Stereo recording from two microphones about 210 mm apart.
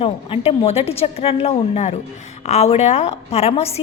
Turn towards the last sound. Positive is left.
turn(degrees=30)  # may be behind; listen again after turning